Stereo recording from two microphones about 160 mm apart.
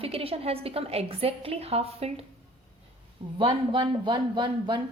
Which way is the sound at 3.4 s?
30° right (ahead or behind).